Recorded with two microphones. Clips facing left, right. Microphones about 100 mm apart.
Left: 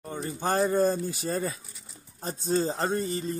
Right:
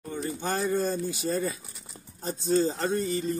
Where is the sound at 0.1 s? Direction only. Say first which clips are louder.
Left 2 dB; 40° left (ahead or behind).